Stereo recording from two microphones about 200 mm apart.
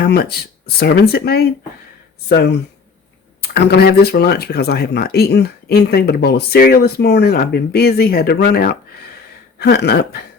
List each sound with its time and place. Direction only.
0.0 s speech: 50° left (ahead or behind)